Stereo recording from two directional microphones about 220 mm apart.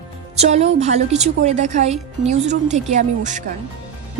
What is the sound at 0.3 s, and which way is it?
A woman's voice, 30° right (ahead or behind).